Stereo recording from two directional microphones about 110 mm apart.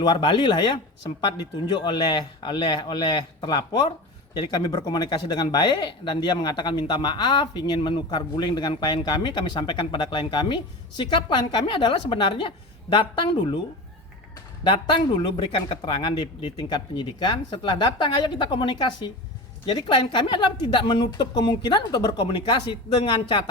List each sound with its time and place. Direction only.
0.0 s speech: 45° left (ahead or behind)
14.6 s speech: 50° left (ahead or behind)